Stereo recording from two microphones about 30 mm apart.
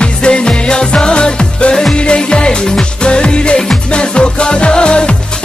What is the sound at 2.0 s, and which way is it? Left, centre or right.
Music, left.